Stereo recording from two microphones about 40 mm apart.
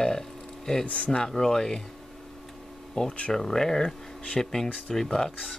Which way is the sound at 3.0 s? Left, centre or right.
Left.